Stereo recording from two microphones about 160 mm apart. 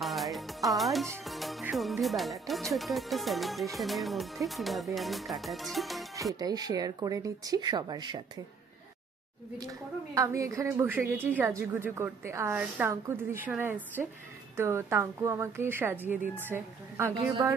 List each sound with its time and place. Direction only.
0.0 s music: centre (ahead or behind)
3.7 s speech: centre (ahead or behind)
6.4 s speech: 25° right (ahead or behind)
9.6 s a woman's voice: 20° right (ahead or behind)